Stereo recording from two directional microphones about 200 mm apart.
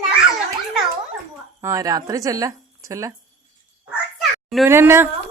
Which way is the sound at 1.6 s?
15° right (ahead or behind).